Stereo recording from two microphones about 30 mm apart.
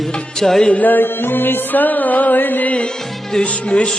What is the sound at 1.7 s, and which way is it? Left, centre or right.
Music, left.